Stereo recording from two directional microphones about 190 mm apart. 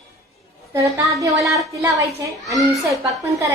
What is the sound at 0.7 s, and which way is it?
A woman's voice, 15° right (ahead or behind).